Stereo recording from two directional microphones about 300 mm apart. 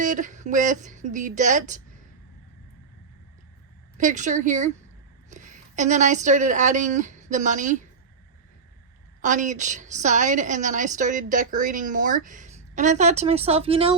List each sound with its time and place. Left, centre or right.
0.0 s a woman's voice: right
3.9 s a woman's voice: right
9.2 s a woman's voice: right